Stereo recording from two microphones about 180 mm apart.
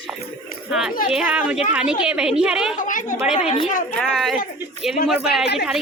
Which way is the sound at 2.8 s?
45° left (ahead or behind).